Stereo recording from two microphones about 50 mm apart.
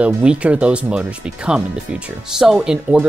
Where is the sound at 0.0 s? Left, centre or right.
Right.